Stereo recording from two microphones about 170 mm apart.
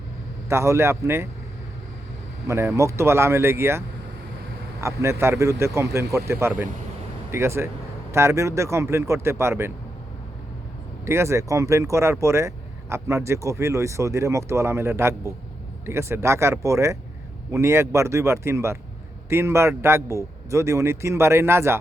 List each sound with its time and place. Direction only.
0.4 s speech: 15° right (ahead or behind)
2.5 s speech: 15° right (ahead or behind)
11.0 s speech: 15° right (ahead or behind)